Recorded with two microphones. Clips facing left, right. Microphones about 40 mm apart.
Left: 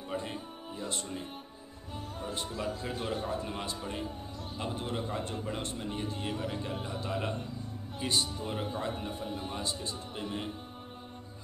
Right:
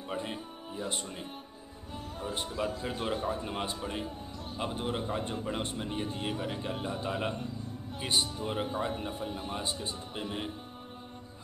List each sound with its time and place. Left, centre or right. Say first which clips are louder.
0.1 s speech: right 1 dB; centre
2.3 s a man's voice: right 2 dB; centre